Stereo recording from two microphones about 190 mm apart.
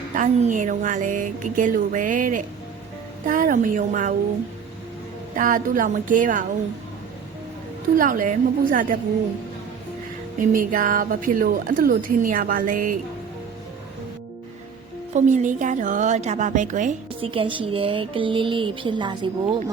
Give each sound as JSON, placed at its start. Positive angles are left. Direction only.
{"t": 0.1, "sound": "a woman's voice", "side_deg": -40}
{"t": 5.3, "sound": "a woman's voice", "side_deg": -45}
{"t": 7.9, "sound": "a woman's voice", "side_deg": -45}
{"t": 10.5, "sound": "a woman's voice", "side_deg": -45}
{"t": 15.1, "sound": "a woman's voice", "side_deg": -40}
{"t": 17.2, "sound": "speech", "side_deg": -30}